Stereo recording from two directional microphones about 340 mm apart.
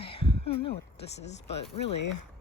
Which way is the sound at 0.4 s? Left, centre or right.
Centre.